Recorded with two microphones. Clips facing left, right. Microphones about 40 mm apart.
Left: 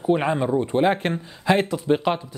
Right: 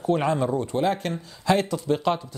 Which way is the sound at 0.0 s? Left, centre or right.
Centre.